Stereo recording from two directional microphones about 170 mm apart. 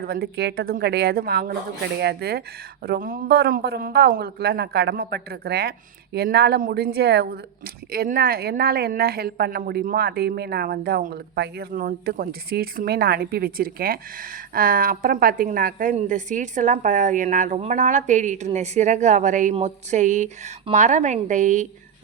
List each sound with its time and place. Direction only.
0.0 s speech: 65° right (ahead or behind); by 21.7 s 45° right (ahead or behind)